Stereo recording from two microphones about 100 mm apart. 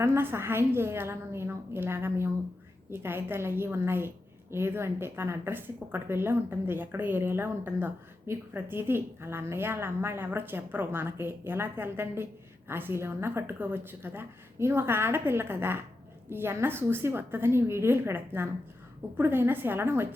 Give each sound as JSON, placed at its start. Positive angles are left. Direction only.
{"t": 0.0, "sound": "speech", "side_deg": -25}